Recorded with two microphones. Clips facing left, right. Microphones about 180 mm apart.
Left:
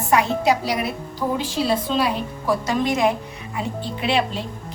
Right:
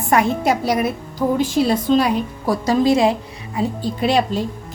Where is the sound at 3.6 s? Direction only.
40° right (ahead or behind).